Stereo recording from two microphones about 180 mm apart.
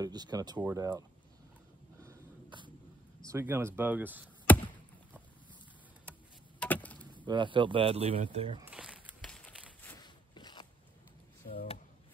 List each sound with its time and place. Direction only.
0.0 s speech: 20° right (ahead or behind)
2.0 s sneeze: 25° right (ahead or behind)
3.3 s speech: 15° right (ahead or behind)
4.5 s chop: 10° left (ahead or behind)
6.6 s chop: 10° left (ahead or behind)
7.2 s speech: 25° right (ahead or behind)
8.6 s a sound: 5° right (ahead or behind)
9.9 s a sound: 25° left (ahead or behind)
11.4 s speech: 55° left (ahead or behind)